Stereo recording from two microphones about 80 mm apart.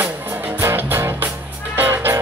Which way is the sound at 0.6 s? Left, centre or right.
Right.